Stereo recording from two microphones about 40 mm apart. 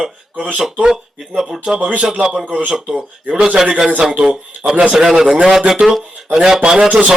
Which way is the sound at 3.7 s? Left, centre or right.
Right.